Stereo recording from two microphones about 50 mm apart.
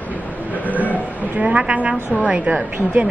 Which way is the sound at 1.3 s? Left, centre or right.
Right.